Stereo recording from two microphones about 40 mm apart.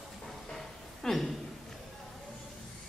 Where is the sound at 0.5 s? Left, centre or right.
Centre.